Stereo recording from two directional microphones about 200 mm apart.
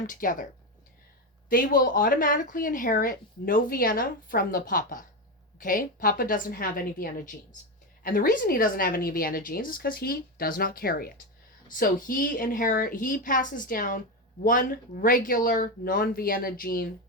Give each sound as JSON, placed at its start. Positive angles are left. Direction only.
{"t": 0.1, "sound": "speech", "side_deg": 40}
{"t": 1.5, "sound": "speech", "side_deg": 45}